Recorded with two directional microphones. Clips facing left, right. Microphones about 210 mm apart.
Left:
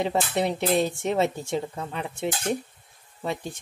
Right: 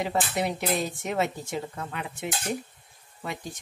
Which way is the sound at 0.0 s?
25° left (ahead or behind).